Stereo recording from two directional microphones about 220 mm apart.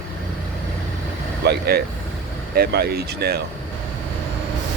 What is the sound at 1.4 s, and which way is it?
Speech, 45° right (ahead or behind).